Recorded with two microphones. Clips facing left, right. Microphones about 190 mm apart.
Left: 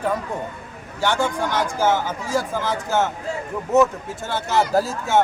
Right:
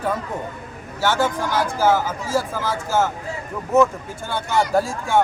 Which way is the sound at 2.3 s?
15° left (ahead or behind).